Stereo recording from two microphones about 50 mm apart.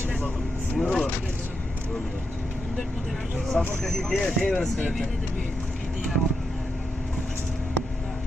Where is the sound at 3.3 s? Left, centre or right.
Centre.